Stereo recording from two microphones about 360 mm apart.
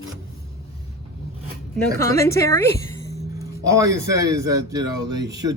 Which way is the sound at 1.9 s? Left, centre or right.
Centre.